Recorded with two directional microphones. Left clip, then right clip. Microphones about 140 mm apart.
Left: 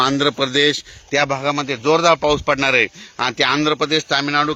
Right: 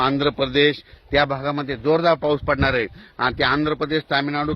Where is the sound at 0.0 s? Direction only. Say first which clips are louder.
Left 3 dB; 45° left (ahead or behind).